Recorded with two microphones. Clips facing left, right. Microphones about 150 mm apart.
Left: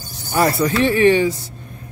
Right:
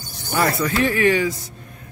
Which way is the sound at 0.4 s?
30° left (ahead or behind).